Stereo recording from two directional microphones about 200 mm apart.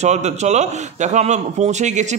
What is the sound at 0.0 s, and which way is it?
A man's voice, 35° right (ahead or behind).